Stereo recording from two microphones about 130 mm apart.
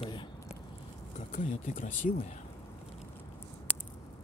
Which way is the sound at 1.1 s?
70° left (ahead or behind).